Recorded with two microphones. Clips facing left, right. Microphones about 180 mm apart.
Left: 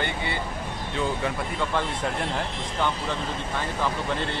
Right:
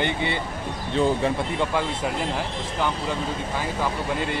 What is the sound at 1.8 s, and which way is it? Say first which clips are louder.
Speech: right 2 dB; 5° right (ahead or behind).